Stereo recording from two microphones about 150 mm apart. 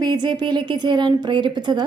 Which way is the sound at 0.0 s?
30° right (ahead or behind).